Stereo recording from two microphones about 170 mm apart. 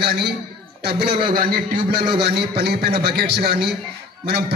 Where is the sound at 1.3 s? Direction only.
60° right (ahead or behind).